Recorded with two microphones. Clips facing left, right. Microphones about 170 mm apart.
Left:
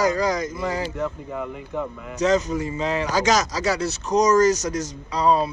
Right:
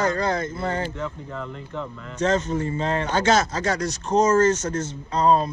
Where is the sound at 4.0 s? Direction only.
30° right (ahead or behind).